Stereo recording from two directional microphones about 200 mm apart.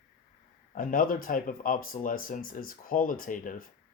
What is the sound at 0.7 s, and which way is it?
Speech, 45° left (ahead or behind).